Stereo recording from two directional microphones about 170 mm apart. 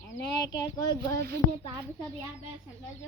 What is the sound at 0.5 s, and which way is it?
Speech, 25° left (ahead or behind).